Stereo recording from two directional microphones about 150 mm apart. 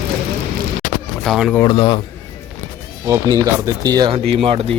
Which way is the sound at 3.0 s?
20° right (ahead or behind).